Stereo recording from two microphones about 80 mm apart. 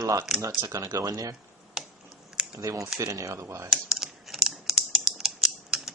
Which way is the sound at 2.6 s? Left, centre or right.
Right.